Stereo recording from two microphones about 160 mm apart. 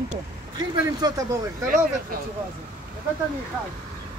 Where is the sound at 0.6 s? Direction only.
25° right (ahead or behind).